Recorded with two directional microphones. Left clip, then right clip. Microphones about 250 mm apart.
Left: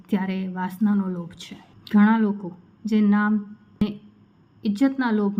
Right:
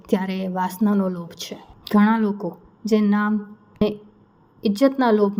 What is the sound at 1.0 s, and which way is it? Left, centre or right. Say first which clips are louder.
A woman's voice: right 5 dB; centre.